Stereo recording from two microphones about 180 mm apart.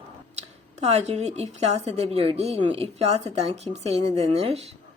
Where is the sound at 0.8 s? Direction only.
35° right (ahead or behind).